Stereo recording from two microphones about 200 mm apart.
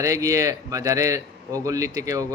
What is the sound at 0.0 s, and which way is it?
Speech, 15° right (ahead or behind).